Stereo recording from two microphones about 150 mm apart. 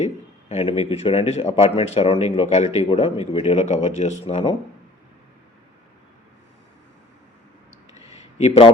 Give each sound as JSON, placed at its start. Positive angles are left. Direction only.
{"t": 0.0, "sound": "a man's voice", "side_deg": 45}
{"t": 2.9, "sound": "a man's voice", "side_deg": 35}
{"t": 8.4, "sound": "a man's voice", "side_deg": 40}